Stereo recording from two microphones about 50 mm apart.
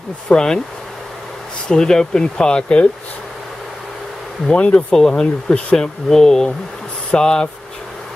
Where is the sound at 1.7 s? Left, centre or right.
Centre.